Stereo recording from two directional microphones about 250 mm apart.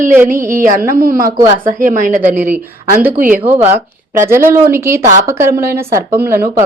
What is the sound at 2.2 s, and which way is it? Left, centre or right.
Speech, centre.